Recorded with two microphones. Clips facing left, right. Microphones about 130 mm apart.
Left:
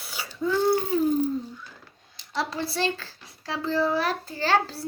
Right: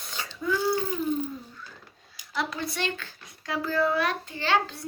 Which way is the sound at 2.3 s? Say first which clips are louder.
Left 2 dB; 30° left (ahead or behind).